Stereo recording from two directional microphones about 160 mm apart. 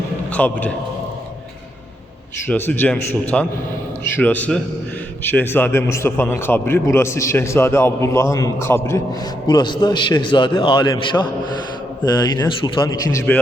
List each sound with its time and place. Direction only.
0.3 s a man's voice: 10° left (ahead or behind)
2.5 s a man's voice: 10° left (ahead or behind)
9.5 s a man's voice: 25° left (ahead or behind)
12.4 s a man's voice: 25° left (ahead or behind)
13.3 s a man's voice: 10° left (ahead or behind)